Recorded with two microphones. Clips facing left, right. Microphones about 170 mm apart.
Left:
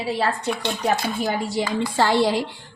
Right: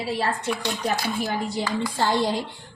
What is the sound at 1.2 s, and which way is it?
A woman's voice, 90° left.